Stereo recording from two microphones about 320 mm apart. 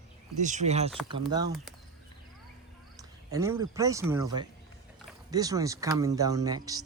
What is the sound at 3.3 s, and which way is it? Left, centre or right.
Speech, centre.